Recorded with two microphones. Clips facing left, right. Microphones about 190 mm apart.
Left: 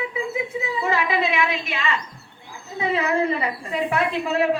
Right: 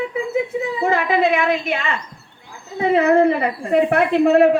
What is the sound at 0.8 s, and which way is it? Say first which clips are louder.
A woman's voice: right 5 dB; 50° right (ahead or behind).